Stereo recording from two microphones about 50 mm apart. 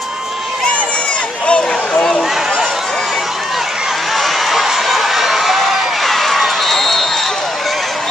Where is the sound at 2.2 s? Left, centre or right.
Centre.